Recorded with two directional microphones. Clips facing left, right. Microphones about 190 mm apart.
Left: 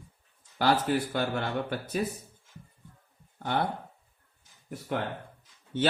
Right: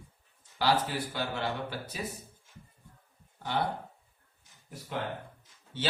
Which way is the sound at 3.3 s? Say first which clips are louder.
Left 3 dB; 50° left (ahead or behind).